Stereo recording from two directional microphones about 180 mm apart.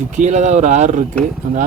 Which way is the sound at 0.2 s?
40° right (ahead or behind).